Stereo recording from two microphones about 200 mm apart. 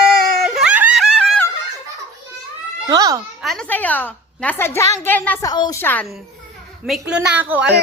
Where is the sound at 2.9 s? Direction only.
20° right (ahead or behind).